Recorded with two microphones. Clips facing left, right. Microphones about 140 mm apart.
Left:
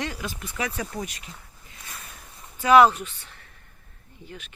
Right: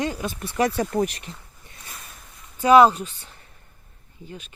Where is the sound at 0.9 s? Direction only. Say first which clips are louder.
Right 10 dB; 50° right (ahead or behind).